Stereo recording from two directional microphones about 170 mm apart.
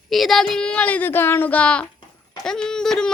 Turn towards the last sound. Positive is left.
turn(degrees=5)  # may be behind; listen again after turning